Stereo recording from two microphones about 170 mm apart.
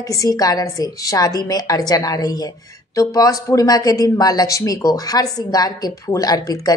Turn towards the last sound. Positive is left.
turn(degrees=20)  # may be behind; listen again after turning